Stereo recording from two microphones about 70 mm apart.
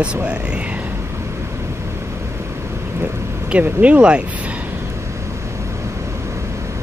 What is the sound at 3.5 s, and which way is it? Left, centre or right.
Speech, centre.